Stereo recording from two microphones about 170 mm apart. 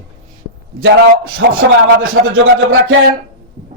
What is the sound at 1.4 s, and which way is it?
Speech, 90° right.